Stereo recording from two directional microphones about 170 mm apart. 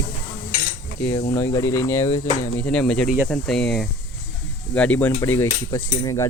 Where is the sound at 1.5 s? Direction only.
15° left (ahead or behind).